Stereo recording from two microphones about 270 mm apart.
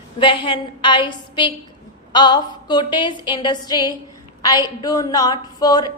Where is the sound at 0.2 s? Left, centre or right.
Centre.